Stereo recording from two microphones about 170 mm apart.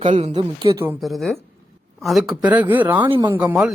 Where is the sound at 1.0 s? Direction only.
Centre (ahead or behind).